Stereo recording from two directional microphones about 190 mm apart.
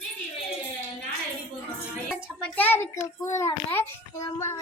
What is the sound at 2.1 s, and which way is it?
A child's voice, 10° left (ahead or behind).